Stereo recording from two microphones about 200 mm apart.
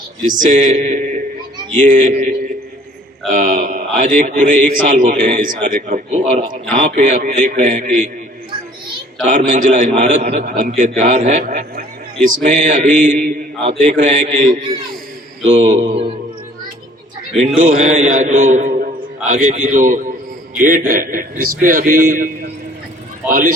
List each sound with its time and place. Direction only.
0.3 s a man's voice: 40° right (ahead or behind)
9.2 s a man's voice: 40° right (ahead or behind)
17.6 s a man's voice: 40° right (ahead or behind)
23.3 s a man's voice: 40° right (ahead or behind)